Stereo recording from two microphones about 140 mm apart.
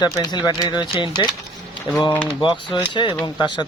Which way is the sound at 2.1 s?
10° left (ahead or behind).